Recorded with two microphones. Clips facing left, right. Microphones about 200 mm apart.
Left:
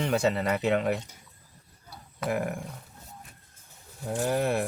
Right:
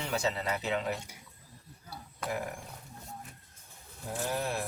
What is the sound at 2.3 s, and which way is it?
Speech, 60° left (ahead or behind).